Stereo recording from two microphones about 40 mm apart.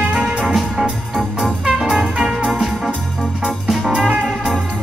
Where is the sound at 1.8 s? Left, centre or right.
Centre.